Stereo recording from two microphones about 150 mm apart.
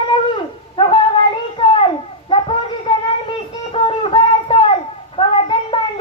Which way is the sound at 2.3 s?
35° left (ahead or behind).